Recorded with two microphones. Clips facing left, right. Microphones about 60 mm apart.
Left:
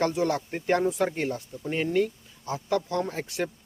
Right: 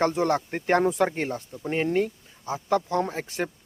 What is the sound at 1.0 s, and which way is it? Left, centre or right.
Speech, right.